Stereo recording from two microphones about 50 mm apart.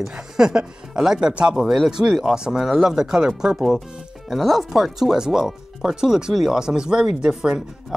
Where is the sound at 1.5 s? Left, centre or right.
Centre.